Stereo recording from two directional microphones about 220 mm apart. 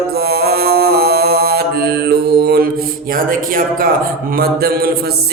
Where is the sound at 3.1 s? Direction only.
40° right (ahead or behind).